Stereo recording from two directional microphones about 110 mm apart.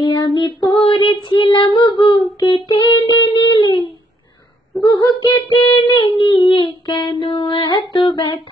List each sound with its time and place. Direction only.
0.0 s child singing: 45° left (ahead or behind)
5.2 s child singing: 50° left (ahead or behind)